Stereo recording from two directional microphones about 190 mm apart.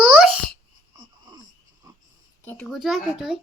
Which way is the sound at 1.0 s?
20° right (ahead or behind).